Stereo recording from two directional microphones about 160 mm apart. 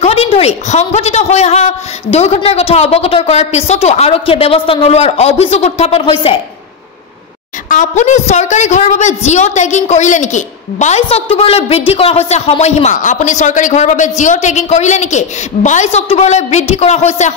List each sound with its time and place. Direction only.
0.0 s a woman's voice: 40° left (ahead or behind)
7.6 s speech: 50° left (ahead or behind)